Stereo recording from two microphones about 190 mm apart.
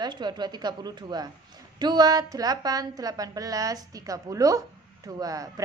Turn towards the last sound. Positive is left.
turn(degrees=-15)  # may be behind; listen again after turning